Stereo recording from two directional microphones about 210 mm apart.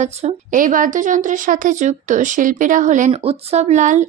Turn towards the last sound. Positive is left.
turn(degrees=-35)  # may be behind; listen again after turning